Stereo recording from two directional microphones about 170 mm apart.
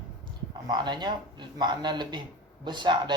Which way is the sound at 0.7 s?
25° right (ahead or behind).